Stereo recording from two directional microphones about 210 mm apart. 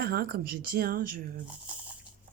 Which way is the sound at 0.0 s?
45° right (ahead or behind).